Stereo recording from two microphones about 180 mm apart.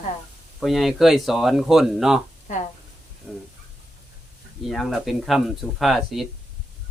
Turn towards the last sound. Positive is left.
turn(degrees=0)  # may be behind; listen again after turning